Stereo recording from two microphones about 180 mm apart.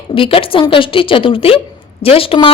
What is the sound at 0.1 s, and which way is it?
A woman's voice, 30° left (ahead or behind).